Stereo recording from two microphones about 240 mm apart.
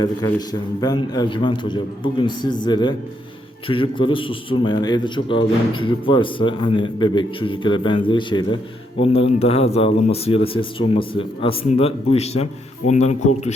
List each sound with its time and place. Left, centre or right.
0.0 s a man's voice: centre